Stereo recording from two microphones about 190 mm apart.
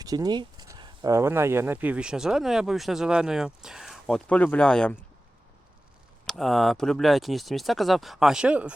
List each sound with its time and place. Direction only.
0.0 s speech: 20° right (ahead or behind); by 4.9 s 5° left (ahead or behind)
6.2 s speech: centre (ahead or behind)